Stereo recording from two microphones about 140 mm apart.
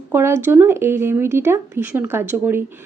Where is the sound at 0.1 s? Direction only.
20° right (ahead or behind).